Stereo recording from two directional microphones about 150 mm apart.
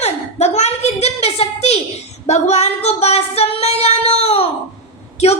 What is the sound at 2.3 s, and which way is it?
Female singing, 45° left (ahead or behind).